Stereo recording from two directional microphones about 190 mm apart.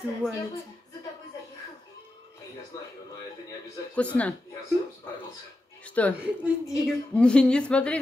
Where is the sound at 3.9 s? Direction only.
5° left (ahead or behind).